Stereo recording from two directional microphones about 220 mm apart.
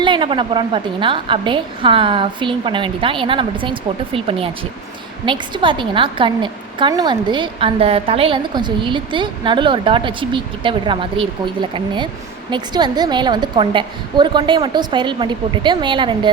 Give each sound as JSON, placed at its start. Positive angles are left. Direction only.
{"t": 0.0, "sound": "a woman's voice", "side_deg": -20}